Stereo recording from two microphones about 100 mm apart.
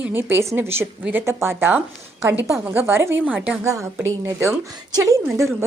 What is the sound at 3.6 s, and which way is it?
A woman's voice, 30° right (ahead or behind).